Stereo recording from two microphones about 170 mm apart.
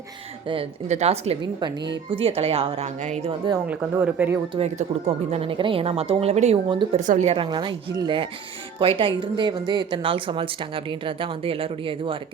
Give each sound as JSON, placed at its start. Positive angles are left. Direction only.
{"t": 0.4, "sound": "speech", "side_deg": -35}
{"t": 3.7, "sound": "speech", "side_deg": -10}
{"t": 4.5, "sound": "speech", "side_deg": -40}
{"t": 7.0, "sound": "a woman's voice", "side_deg": -45}
{"t": 7.3, "sound": "speech", "side_deg": -30}